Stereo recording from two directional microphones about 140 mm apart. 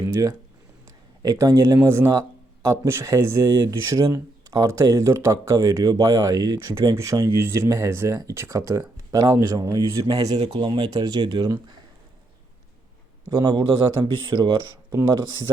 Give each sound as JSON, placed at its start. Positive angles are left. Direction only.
{"t": 1.2, "sound": "speech", "side_deg": -25}
{"t": 13.2, "sound": "a man's voice", "side_deg": -25}